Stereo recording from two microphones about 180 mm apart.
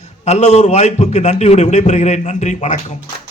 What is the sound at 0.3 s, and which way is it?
Speech, 40° left (ahead or behind).